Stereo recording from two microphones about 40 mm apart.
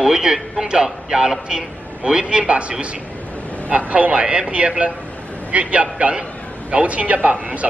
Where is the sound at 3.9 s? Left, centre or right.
Right.